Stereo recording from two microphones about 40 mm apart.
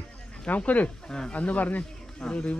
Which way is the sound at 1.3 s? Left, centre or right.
Left.